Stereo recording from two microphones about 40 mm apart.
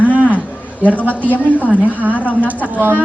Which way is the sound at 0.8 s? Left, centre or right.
Left.